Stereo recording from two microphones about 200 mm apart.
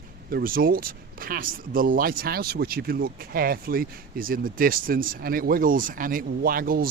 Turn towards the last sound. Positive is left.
turn(degrees=-45)  # may be behind; listen again after turning